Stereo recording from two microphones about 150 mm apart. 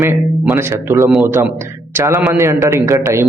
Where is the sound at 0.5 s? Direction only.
20° right (ahead or behind).